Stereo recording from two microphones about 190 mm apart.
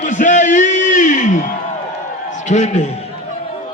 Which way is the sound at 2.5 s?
40° left (ahead or behind).